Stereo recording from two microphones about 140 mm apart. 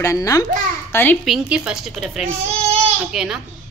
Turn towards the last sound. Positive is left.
turn(degrees=-5)  # may be behind; listen again after turning